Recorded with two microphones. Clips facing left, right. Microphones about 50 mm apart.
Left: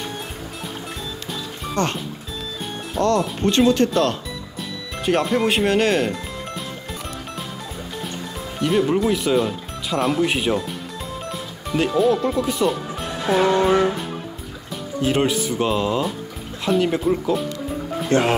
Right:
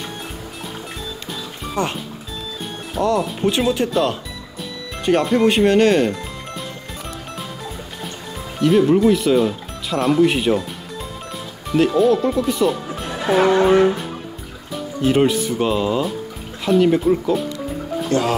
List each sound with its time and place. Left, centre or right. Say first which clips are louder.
1.3 s music: even; centre
2.9 s speech: even; centre
8.5 s speech: right 5 dB; centre
13.7 s music: right 4 dB; centre
15.0 s speech: right 3 dB; centre
18.1 s speech: left 1 dB; left